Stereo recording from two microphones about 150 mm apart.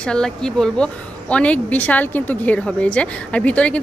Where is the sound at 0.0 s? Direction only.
5° left (ahead or behind).